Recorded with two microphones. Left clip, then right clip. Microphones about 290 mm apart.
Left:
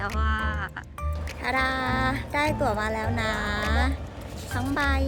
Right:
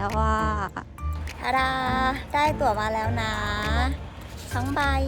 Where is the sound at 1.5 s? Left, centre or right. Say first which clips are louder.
Right 2 dB; centre.